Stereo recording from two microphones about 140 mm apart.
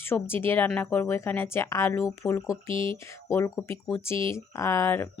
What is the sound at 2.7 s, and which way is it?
Speech, 40° right (ahead or behind).